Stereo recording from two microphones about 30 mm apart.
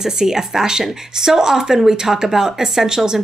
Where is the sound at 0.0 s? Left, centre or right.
Centre.